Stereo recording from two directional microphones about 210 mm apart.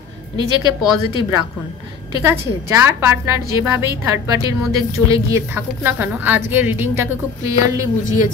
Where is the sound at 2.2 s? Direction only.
10° right (ahead or behind).